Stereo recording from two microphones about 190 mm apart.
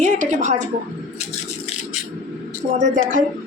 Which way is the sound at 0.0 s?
40° right (ahead or behind).